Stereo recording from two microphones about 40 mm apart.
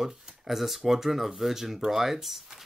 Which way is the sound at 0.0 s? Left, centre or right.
Centre.